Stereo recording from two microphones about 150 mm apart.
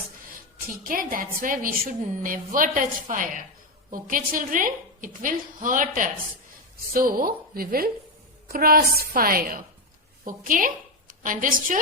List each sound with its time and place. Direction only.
0.9 s a woman's voice: 70° right (ahead or behind)
6.9 s a woman's voice: 75° right (ahead or behind)